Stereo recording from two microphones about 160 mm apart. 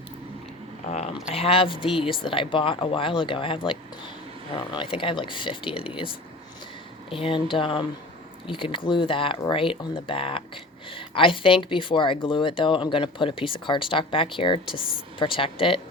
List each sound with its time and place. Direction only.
0.9 s speech: 40° left (ahead or behind)
7.1 s speech: 35° left (ahead or behind)